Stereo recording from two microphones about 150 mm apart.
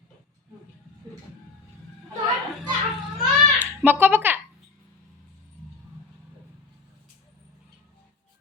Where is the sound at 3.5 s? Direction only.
10° right (ahead or behind).